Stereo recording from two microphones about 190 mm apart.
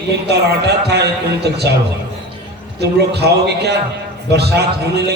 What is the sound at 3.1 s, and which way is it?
Speech, 60° right (ahead or behind).